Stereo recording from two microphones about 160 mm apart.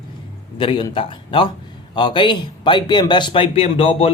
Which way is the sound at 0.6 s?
30° left (ahead or behind).